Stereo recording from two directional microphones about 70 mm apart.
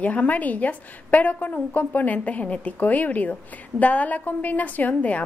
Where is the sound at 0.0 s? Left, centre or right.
Left.